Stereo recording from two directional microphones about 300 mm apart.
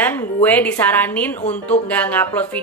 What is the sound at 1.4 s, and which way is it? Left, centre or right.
Speech, left.